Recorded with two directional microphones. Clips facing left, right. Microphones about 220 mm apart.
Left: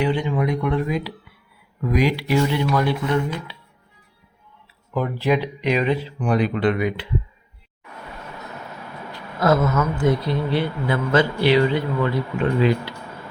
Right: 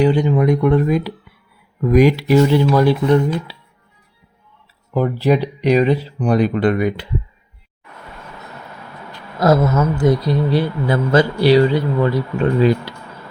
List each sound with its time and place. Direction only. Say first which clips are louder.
0.0 s speech: right 7 dB; 40° right (ahead or behind)
4.9 s speech: right 5 dB; 35° right (ahead or behind)
9.4 s speech: right 4 dB; 40° right (ahead or behind)